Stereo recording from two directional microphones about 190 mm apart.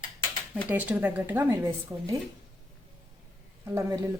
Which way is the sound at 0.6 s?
5° right (ahead or behind).